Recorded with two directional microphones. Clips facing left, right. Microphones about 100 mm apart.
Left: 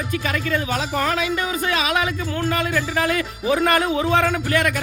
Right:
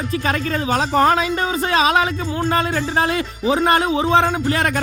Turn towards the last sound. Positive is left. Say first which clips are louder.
# right 1 dB
turn(degrees=-30)  # may be behind; listen again after turning